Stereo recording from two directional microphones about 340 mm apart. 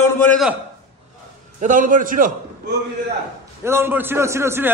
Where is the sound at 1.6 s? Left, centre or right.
Right.